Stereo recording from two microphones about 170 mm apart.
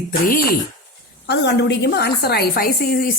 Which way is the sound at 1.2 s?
80° left.